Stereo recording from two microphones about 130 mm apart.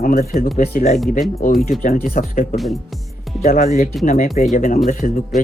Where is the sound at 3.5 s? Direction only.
75° left (ahead or behind).